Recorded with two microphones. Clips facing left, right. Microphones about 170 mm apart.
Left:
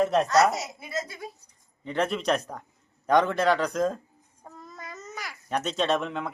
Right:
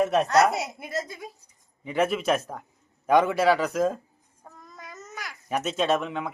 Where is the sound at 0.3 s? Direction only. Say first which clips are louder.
Right 1 dB; 60° right (ahead or behind).